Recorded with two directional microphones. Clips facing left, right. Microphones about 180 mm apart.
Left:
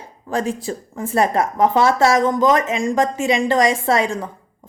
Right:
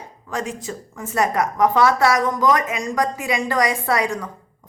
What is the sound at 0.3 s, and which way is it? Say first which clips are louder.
Speech: left 5 dB; 30° left (ahead or behind).